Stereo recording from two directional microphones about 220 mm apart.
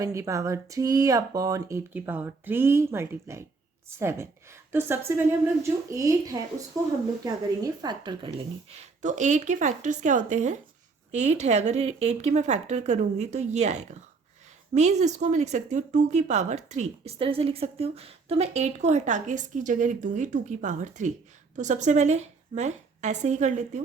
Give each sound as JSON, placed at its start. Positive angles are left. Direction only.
{"t": 0.0, "sound": "speech", "side_deg": -15}
{"t": 8.7, "sound": "a woman's voice", "side_deg": -30}